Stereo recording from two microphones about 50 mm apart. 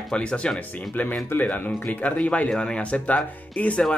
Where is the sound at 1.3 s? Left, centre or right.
Left.